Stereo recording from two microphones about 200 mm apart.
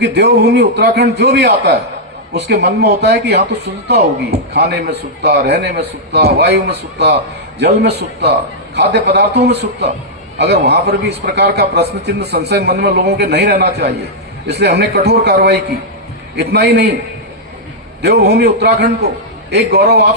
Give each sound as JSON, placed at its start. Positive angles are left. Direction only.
{"t": 0.0, "sound": "a man's voice", "side_deg": -55}
{"t": 18.0, "sound": "a man's voice", "side_deg": -55}